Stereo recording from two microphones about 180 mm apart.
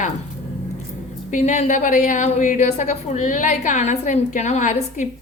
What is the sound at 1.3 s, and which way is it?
A woman's voice, 40° left (ahead or behind).